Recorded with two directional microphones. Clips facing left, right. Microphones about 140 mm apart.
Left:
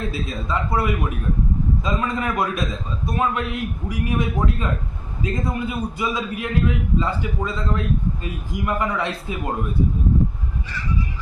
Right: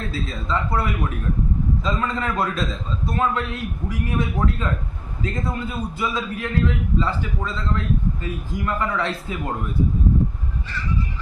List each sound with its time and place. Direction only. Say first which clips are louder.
0.1 s a man's voice: even; 15° left (ahead or behind)